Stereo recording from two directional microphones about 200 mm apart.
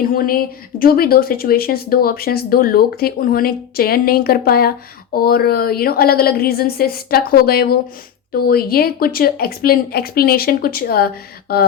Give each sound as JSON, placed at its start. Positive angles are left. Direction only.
{"t": 0.2, "sound": "a woman's voice", "side_deg": 45}